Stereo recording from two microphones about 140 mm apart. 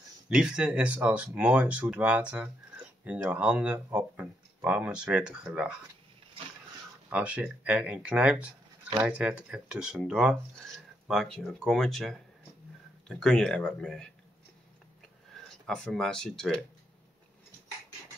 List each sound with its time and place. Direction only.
0.3 s speech: 5° right (ahead or behind)
7.1 s speech: 10° right (ahead or behind); by 14.1 s 5° left (ahead or behind)
15.3 s speech: 5° left (ahead or behind)